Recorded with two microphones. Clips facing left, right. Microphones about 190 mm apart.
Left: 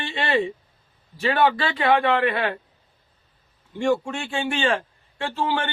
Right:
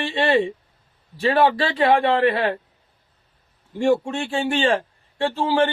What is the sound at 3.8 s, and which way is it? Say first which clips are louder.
A man's voice: right 3 dB; 35° right (ahead or behind).